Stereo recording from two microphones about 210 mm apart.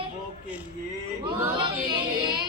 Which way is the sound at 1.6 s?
20° right (ahead or behind).